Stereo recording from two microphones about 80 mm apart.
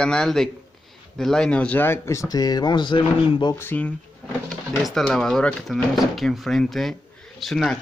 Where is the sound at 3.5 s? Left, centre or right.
Left.